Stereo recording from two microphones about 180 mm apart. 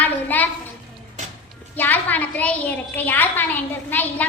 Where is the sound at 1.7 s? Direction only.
10° left (ahead or behind).